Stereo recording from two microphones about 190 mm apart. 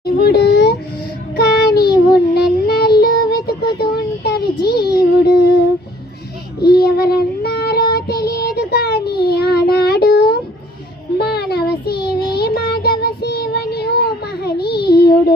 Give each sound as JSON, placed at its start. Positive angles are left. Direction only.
{"t": 0.0, "sound": "a sound", "side_deg": 60}
{"t": 1.4, "sound": "child singing", "side_deg": 55}
{"t": 6.6, "sound": "child singing", "side_deg": 55}